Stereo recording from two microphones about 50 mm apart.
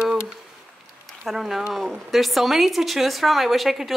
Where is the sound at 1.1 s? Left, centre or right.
Centre.